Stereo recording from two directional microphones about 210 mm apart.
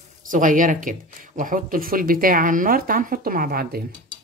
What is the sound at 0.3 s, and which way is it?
Speech, 40° right (ahead or behind).